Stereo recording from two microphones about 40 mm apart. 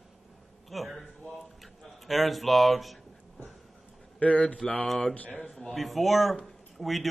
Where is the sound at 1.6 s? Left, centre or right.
Centre.